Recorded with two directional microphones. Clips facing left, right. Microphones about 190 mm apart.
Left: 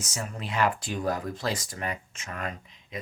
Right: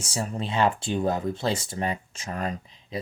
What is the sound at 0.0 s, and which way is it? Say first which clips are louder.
Speech: right 5 dB; 30° right (ahead or behind).